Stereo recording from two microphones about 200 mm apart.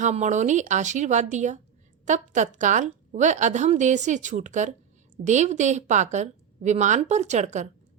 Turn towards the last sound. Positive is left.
turn(degrees=-35)  # may be behind; listen again after turning